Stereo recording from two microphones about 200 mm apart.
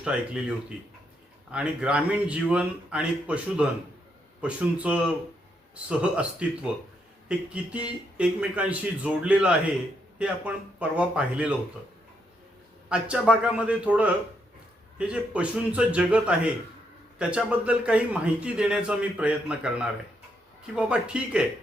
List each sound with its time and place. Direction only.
0.0 s a man's voice: 5° right (ahead or behind)
12.9 s a man's voice: 5° right (ahead or behind)